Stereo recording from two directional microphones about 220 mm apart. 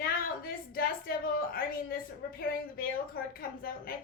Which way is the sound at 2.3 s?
40° left (ahead or behind).